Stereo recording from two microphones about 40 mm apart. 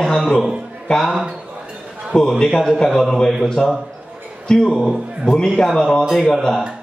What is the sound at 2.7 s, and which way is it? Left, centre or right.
Speech, centre.